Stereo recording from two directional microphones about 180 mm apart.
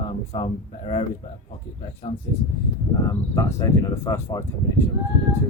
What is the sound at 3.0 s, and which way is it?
Speech, 15° left (ahead or behind).